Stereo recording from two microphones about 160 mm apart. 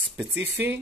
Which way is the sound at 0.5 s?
15° right (ahead or behind).